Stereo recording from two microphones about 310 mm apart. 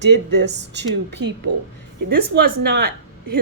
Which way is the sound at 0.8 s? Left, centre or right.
Right.